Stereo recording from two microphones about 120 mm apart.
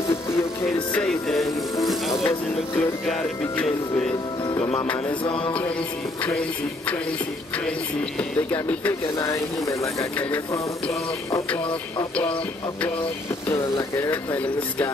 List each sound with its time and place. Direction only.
0.7 s speech: 10° left (ahead or behind)
2.2 s speech: 20° left (ahead or behind)
5.2 s music: 45° left (ahead or behind)
8.2 s speech: 15° left (ahead or behind)
9.3 s speech: 25° left (ahead or behind)
13.5 s speech: 20° left (ahead or behind)